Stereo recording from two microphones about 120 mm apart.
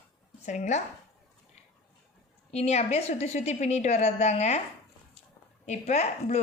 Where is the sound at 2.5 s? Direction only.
65° left (ahead or behind).